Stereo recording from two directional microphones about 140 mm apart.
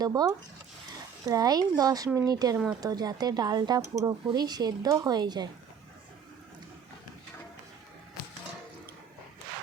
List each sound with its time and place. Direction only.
0.0 s a woman's voice: 25° right (ahead or behind)